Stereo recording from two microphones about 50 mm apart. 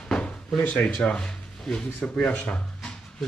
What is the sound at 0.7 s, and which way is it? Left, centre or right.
Speech, left.